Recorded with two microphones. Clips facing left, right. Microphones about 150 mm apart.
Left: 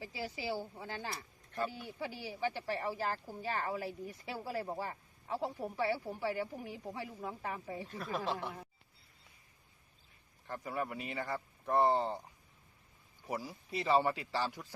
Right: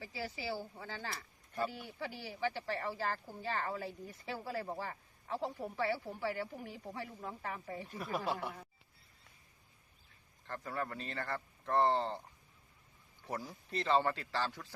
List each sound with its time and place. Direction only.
0.0 s speech: 15° left (ahead or behind)
7.9 s speech: 10° right (ahead or behind)
10.4 s speech: 15° left (ahead or behind)
13.2 s speech: 10° left (ahead or behind)